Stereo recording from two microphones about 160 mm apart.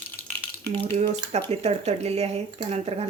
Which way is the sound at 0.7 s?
40° right (ahead or behind).